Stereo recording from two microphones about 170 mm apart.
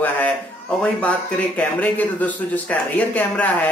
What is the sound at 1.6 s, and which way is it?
Speech, 10° left (ahead or behind).